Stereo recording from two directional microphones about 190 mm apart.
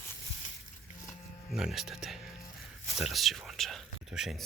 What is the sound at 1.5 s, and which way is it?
Speech, centre (ahead or behind).